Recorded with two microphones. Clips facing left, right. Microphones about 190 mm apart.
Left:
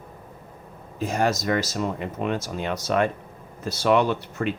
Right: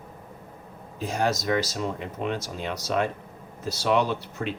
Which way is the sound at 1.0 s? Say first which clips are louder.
Left 2 dB; 50° left (ahead or behind).